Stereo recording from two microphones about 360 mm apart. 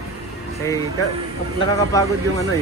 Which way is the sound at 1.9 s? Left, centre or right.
Centre.